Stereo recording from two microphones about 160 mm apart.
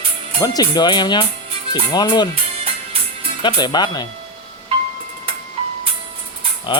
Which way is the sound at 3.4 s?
25° left (ahead or behind).